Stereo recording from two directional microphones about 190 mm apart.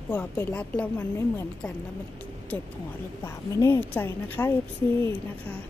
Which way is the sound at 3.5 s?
15° left (ahead or behind).